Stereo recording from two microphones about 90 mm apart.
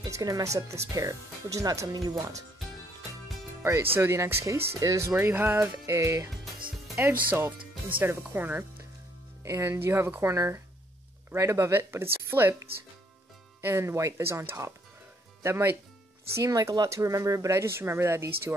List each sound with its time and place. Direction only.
0.1 s speech: 35° right (ahead or behind)
3.6 s speech: 25° right (ahead or behind)
5.3 s speech: 20° right (ahead or behind)
6.6 s music: 20° right (ahead or behind)
8.3 s speech: 20° right (ahead or behind)
9.4 s speech: 30° right (ahead or behind)